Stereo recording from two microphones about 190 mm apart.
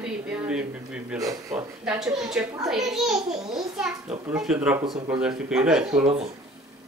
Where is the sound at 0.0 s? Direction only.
5° right (ahead or behind).